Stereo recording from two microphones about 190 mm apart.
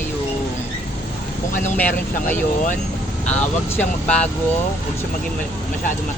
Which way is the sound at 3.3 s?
10° left (ahead or behind).